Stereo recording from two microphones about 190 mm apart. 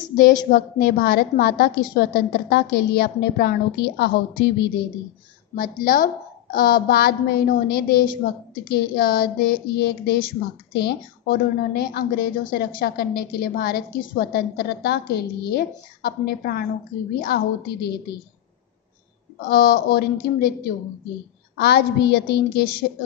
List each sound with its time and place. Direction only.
0.2 s a woman's voice: 50° left (ahead or behind)
19.5 s a woman's voice: 50° left (ahead or behind)